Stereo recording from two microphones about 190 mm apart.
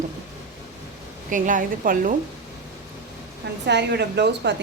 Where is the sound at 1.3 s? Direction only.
45° right (ahead or behind).